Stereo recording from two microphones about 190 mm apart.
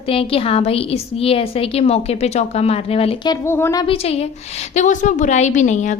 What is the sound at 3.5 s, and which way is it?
Speech, 15° left (ahead or behind).